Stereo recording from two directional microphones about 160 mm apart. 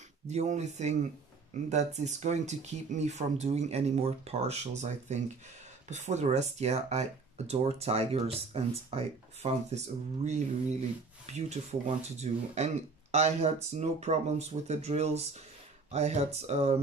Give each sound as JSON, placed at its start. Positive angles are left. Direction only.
{"t": 0.3, "sound": "speech", "side_deg": -45}
{"t": 12.2, "sound": "speech", "side_deg": -45}